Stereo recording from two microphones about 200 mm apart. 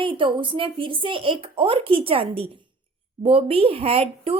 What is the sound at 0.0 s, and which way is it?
Speech, 25° right (ahead or behind).